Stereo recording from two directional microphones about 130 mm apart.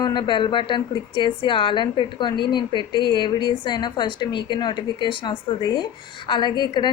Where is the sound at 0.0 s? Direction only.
35° left (ahead or behind).